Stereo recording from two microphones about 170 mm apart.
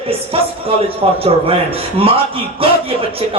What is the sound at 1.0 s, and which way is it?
A man's voice, 30° right (ahead or behind).